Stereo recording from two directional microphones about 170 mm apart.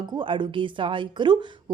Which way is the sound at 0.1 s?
30° right (ahead or behind).